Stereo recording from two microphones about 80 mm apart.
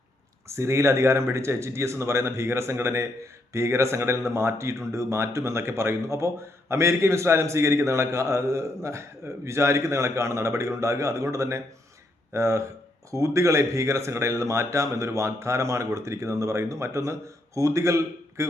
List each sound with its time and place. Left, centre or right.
0.4 s speech: right